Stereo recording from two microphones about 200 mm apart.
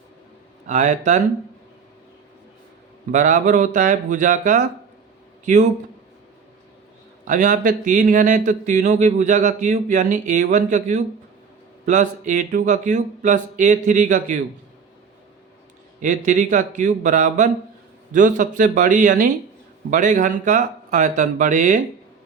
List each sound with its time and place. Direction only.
0.7 s speech: 40° right (ahead or behind)
3.1 s speech: 40° right (ahead or behind)
7.3 s speech: 40° right (ahead or behind)
16.0 s speech: 40° right (ahead or behind)